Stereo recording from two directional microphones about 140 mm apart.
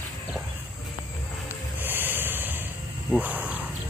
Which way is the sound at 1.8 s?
15° right (ahead or behind).